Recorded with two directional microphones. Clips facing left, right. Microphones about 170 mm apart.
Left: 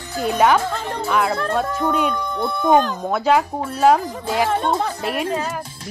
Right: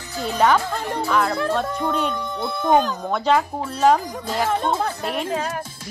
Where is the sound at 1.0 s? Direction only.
5° left (ahead or behind).